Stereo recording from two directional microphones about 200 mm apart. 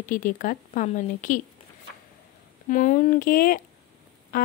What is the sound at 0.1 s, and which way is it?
A woman's voice, 40° left (ahead or behind).